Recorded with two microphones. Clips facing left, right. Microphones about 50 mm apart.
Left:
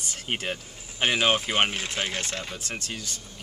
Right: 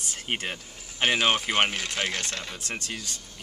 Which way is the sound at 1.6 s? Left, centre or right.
Left.